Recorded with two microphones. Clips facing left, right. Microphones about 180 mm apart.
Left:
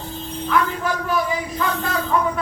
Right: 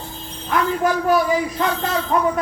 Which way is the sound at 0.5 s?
40° right (ahead or behind).